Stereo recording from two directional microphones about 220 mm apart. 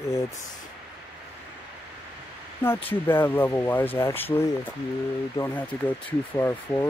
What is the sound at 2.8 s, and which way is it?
Speech, 10° left (ahead or behind).